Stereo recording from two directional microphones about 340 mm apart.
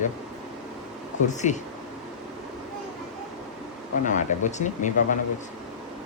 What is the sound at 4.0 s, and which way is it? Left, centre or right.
Speech, left.